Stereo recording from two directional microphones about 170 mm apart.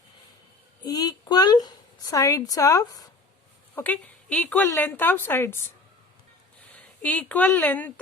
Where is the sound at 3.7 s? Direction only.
10° left (ahead or behind).